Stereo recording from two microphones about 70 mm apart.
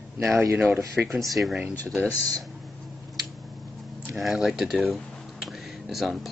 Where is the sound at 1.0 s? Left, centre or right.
Centre.